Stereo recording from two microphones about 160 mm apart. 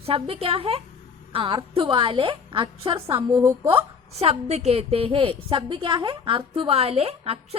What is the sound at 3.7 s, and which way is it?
A woman's voice, 35° right (ahead or behind).